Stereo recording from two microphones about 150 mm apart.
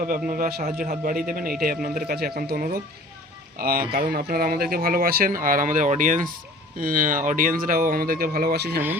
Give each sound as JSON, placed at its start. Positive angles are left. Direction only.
{"t": 0.0, "sound": "speech", "side_deg": -70}
{"t": 2.0, "sound": "speech", "side_deg": -90}
{"t": 3.9, "sound": "speech", "side_deg": -90}